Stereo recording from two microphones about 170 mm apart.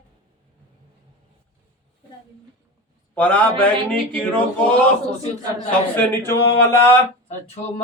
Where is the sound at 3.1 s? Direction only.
10° left (ahead or behind).